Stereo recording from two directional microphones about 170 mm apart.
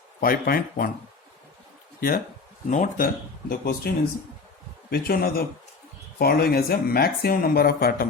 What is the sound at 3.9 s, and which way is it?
Speech, 65° left (ahead or behind).